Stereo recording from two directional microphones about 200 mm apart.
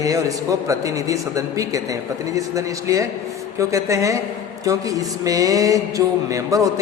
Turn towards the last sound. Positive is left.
turn(degrees=-15)  # may be behind; listen again after turning